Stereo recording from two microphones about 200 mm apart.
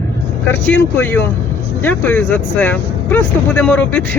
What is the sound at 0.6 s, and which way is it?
Speech, 10° left (ahead or behind).